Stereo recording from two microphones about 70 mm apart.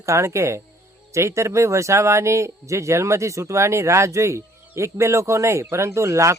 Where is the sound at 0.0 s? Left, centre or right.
Right.